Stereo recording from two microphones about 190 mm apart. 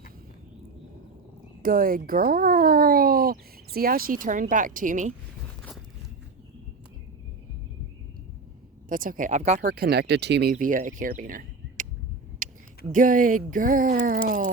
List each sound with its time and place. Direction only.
1.6 s speech: 50° right (ahead or behind)
8.9 s speech: 45° right (ahead or behind)
12.4 s a sound: 45° right (ahead or behind)
12.9 s speech: 45° right (ahead or behind)